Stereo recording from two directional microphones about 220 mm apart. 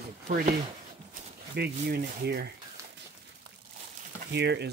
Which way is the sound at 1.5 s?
45° right (ahead or behind).